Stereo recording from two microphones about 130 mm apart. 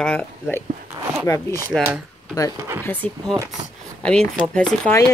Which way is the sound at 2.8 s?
15° left (ahead or behind).